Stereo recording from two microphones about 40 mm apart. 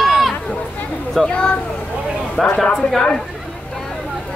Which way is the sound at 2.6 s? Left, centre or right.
Centre.